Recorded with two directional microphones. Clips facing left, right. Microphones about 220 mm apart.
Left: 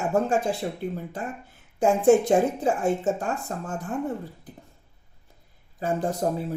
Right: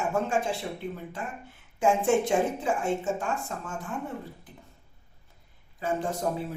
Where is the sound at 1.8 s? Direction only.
35° left (ahead or behind).